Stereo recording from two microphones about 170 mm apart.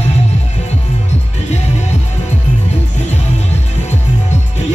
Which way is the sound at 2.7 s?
40° left (ahead or behind).